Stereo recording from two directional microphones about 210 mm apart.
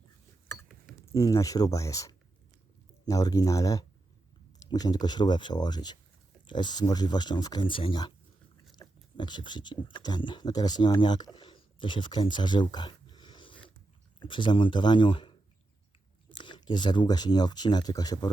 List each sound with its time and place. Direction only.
1.1 s speech: 15° left (ahead or behind)
8.8 s a sound: 20° left (ahead or behind)
9.9 s speech: 20° left (ahead or behind)